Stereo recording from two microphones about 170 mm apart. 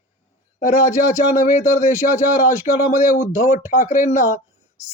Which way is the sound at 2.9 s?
50° left (ahead or behind).